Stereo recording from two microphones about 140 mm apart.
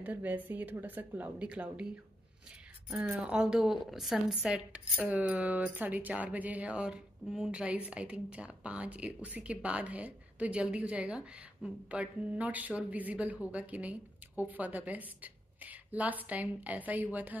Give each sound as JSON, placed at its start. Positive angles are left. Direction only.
{"t": 0.0, "sound": "a woman's voice", "side_deg": -10}
{"t": 2.9, "sound": "a woman's voice", "side_deg": -5}